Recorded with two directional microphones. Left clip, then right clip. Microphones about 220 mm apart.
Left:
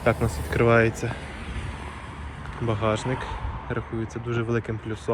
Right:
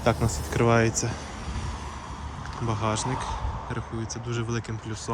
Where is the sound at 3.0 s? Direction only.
45° right (ahead or behind).